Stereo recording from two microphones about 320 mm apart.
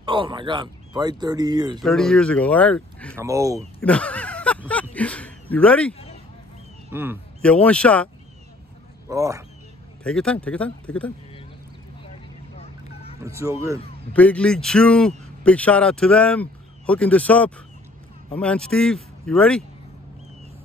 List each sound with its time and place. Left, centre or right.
0.0 s speech: centre
1.8 s a man's voice: centre
3.2 s speech: centre
3.8 s a sound: centre
6.9 s a man's voice: centre
9.1 s speech: centre
10.0 s a man's voice: centre
12.0 s vehicle: centre
13.2 s speech: centre
14.1 s a man's voice: centre